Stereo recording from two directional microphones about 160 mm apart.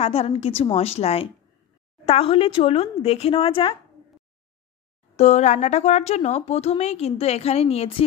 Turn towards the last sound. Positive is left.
turn(degrees=40)  # may be behind; listen again after turning